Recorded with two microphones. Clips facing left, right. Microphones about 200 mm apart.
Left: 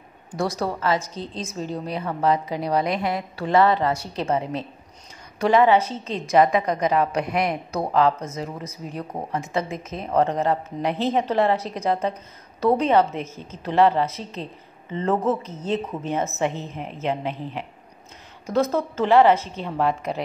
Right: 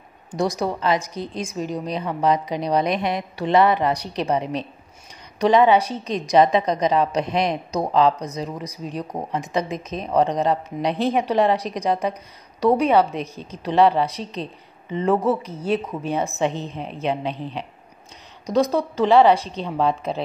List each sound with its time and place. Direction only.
0.3 s a woman's voice: 15° right (ahead or behind)
18.5 s a woman's voice: 15° right (ahead or behind)